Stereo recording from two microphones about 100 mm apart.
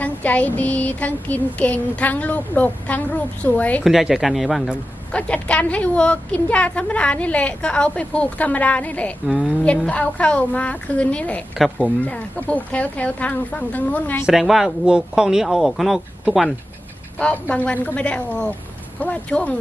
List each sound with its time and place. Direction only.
0.0 s a woman's voice: 15° left (ahead or behind)
3.8 s speech: 5° right (ahead or behind)
5.1 s a woman's voice: 10° left (ahead or behind)
9.2 s speech: 5° right (ahead or behind)
9.8 s a woman's voice: 15° left (ahead or behind)
14.3 s speech: centre (ahead or behind)
17.2 s a woman's voice: 10° left (ahead or behind)